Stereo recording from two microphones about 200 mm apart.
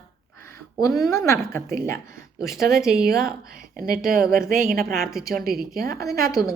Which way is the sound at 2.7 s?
5° right (ahead or behind).